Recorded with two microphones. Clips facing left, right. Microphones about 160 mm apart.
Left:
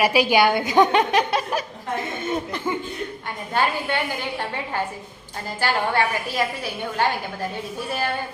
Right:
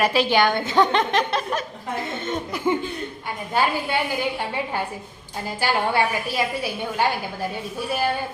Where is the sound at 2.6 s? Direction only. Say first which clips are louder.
Right 6 dB; 10° right (ahead or behind).